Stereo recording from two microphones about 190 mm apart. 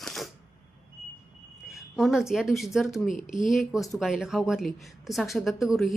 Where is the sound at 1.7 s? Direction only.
Centre (ahead or behind).